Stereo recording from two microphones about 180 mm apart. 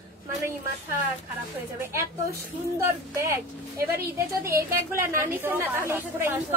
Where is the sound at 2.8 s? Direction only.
15° right (ahead or behind).